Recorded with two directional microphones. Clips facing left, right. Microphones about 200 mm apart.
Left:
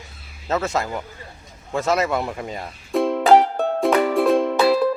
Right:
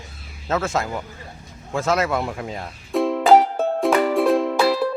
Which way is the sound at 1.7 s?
Centre (ahead or behind).